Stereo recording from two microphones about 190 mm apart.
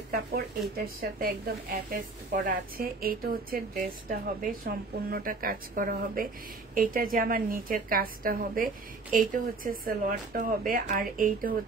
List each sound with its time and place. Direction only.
0.7 s a woman's voice: 50° right (ahead or behind)